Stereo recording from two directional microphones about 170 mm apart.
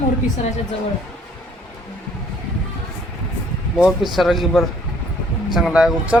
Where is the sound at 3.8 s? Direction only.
Centre (ahead or behind).